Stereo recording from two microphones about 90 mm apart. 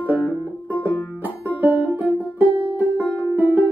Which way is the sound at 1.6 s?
20° right (ahead or behind).